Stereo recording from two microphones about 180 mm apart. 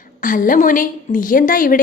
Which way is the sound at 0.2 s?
50° left (ahead or behind).